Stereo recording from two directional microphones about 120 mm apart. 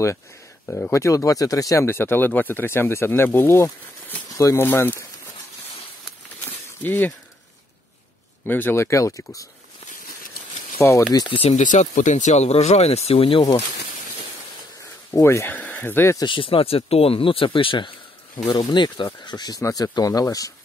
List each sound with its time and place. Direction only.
0.7 s speech: 20° left (ahead or behind)
6.4 s a sound: 15° left (ahead or behind)
8.5 s speech: 15° left (ahead or behind)
10.8 s speech: 20° left (ahead or behind)
11.5 s speech: 90° left; by 13.5 s 50° left (ahead or behind)
15.0 s speech: 20° left (ahead or behind)
16.2 s speech: 45° left (ahead or behind)